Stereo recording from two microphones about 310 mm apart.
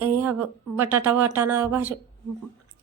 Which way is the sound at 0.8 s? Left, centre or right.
Centre.